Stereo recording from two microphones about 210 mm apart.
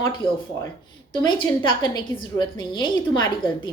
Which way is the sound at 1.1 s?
20° left (ahead or behind).